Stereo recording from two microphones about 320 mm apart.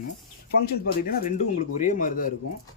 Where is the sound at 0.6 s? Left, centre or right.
Left.